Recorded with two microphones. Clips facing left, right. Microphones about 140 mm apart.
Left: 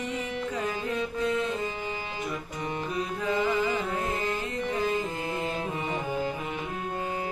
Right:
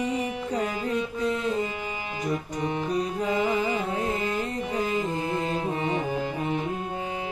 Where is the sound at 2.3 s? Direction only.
30° right (ahead or behind).